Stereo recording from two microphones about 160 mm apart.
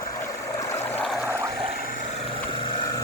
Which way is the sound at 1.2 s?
15° right (ahead or behind).